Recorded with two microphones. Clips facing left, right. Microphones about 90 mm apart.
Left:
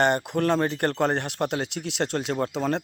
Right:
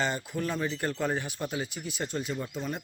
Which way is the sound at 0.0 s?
65° left (ahead or behind).